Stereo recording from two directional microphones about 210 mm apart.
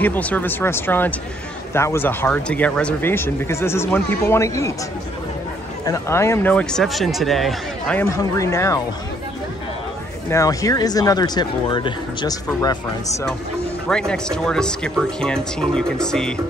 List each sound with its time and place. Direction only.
0.0 s speech: 10° left (ahead or behind)
5.9 s speech: 15° left (ahead or behind)
10.3 s speech: 15° left (ahead or behind)
13.8 s speech: 5° left (ahead or behind)